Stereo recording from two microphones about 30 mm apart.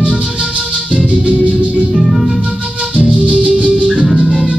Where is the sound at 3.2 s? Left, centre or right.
Right.